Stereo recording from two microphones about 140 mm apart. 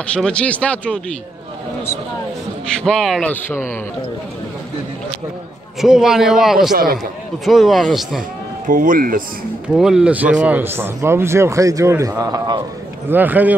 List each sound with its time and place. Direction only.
0.0 s speech: 10° left (ahead or behind)
2.6 s a man's voice: 5° left (ahead or behind)
3.3 s speech: 15° left (ahead or behind)
5.8 s a man's voice: 5° right (ahead or behind)
8.6 s speech: 75° right (ahead or behind)
9.8 s a man's voice: 5° right (ahead or behind); by 12.6 s 30° right (ahead or behind)
13.1 s speech: 10° right (ahead or behind)